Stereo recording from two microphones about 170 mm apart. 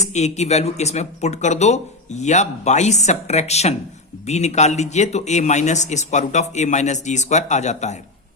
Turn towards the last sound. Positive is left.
turn(degrees=45)  # may be behind; listen again after turning